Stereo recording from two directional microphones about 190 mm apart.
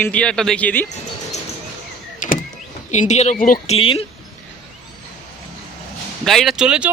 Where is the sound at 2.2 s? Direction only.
45° left (ahead or behind).